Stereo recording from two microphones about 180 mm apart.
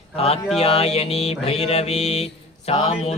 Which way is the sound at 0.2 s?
35° left (ahead or behind).